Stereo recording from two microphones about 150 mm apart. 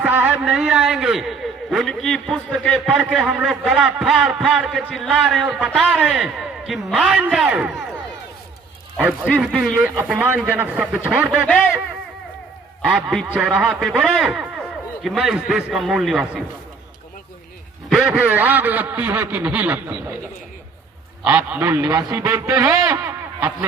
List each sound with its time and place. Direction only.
0.0 s a man's voice: 10° right (ahead or behind)
9.0 s a man's voice: centre (ahead or behind)
10.0 s a man's voice: 10° right (ahead or behind)
12.9 s a man's voice: centre (ahead or behind)
17.8 s a man's voice: 5° right (ahead or behind)
21.2 s a man's voice: 15° right (ahead or behind)
21.7 s a man's voice: 25° right (ahead or behind)